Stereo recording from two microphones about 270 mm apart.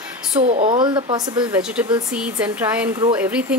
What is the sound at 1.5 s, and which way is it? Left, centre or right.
Speech, centre.